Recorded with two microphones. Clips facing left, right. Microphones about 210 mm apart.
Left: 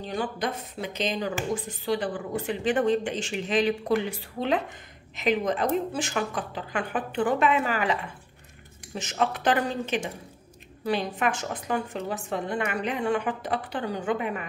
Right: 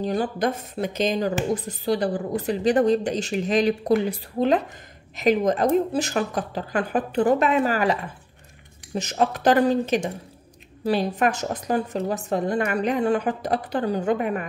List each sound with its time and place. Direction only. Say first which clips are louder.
0.0 s speech: right 6 dB; 40° right (ahead or behind)